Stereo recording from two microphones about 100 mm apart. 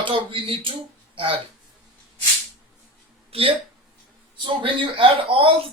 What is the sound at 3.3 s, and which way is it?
Speech, 70° right (ahead or behind).